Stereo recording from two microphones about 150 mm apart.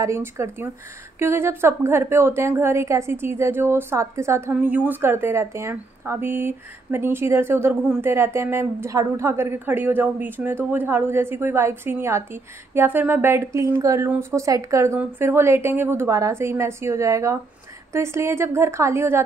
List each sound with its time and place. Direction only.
0.0 s a woman's voice: 20° right (ahead or behind)